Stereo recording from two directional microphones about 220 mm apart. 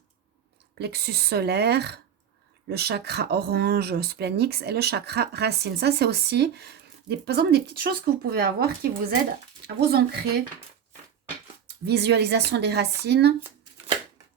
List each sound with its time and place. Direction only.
0.8 s speech: 45° right (ahead or behind)
11.9 s speech: 50° right (ahead or behind)